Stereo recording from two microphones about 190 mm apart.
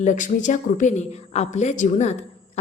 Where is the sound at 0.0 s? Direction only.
40° left (ahead or behind).